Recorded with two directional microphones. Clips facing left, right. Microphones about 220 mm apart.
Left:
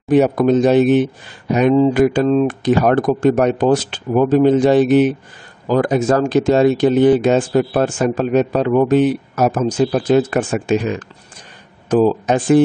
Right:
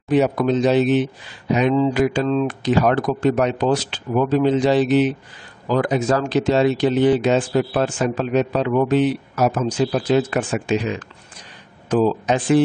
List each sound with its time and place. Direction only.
0.1 s speech: 50° left (ahead or behind)